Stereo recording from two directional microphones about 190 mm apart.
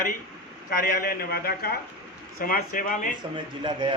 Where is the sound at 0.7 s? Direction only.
50° left (ahead or behind).